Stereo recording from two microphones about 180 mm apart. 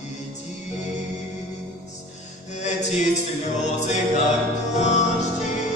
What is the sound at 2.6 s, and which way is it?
Music, 40° left (ahead or behind).